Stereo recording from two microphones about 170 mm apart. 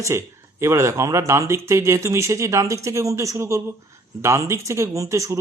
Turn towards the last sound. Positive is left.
turn(degrees=-20)  # may be behind; listen again after turning